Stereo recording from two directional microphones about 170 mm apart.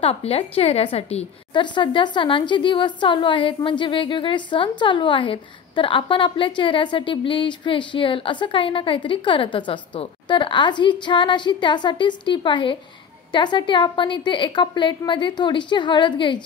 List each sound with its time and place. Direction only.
0.0 s a woman's voice: 35° left (ahead or behind)